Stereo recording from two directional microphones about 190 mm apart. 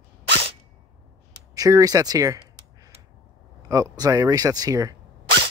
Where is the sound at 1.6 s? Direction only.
20° right (ahead or behind).